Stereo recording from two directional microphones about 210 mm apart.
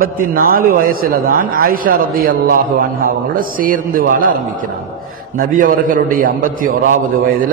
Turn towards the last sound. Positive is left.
turn(degrees=-40)  # may be behind; listen again after turning